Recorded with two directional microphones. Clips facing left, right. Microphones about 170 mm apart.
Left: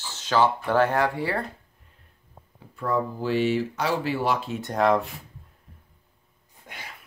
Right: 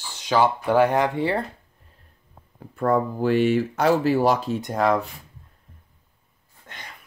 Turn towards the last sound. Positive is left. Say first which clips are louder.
# even
turn(degrees=5)  # may be behind; listen again after turning